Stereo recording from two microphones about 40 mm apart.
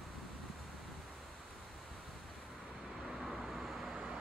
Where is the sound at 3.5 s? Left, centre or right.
Centre.